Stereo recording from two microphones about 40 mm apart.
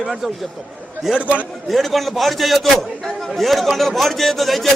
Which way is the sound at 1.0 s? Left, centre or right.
Centre.